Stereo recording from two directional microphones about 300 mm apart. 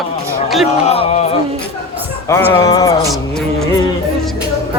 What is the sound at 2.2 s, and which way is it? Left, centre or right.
Speech, centre.